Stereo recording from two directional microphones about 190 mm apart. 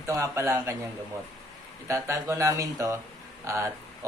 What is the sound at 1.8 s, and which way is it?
Speech, 15° right (ahead or behind).